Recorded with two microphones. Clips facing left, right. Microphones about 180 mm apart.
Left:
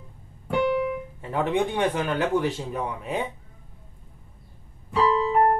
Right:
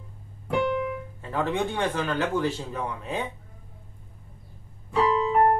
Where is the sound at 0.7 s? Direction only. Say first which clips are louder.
Left 3 dB; 15° left (ahead or behind).